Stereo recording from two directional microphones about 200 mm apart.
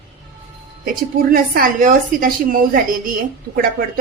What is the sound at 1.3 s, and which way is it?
A woman's voice, 45° right (ahead or behind).